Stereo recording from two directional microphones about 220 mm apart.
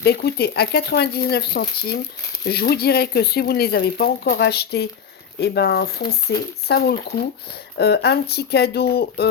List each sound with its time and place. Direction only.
0.0 s speech: 45° left (ahead or behind)